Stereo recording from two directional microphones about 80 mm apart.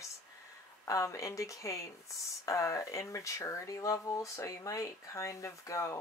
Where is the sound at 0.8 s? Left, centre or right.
Left.